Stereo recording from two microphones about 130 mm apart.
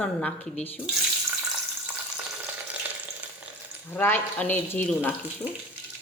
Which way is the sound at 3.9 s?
15° left (ahead or behind).